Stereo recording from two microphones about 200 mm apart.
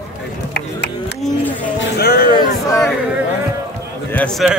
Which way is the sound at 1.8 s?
55° left (ahead or behind).